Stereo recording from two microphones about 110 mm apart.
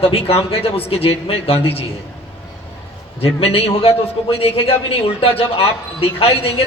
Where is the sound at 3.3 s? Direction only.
60° left (ahead or behind).